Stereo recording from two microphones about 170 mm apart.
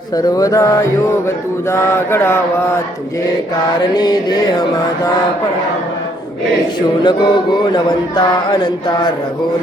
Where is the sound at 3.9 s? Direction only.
25° left (ahead or behind).